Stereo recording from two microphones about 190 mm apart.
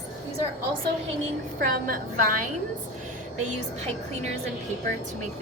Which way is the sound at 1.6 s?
45° right (ahead or behind).